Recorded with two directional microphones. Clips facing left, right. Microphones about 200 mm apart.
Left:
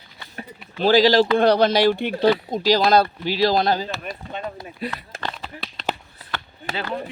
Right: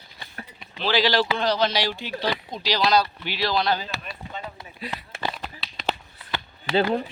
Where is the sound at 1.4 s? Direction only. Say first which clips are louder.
Left 7 dB; 55° left (ahead or behind).